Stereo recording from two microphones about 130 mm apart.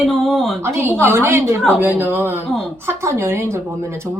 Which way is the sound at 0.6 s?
15° right (ahead or behind).